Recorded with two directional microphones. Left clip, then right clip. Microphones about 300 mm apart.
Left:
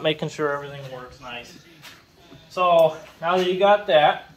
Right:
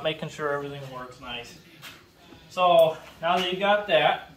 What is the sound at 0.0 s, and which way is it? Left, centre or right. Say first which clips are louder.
Speech: left 5 dB; left.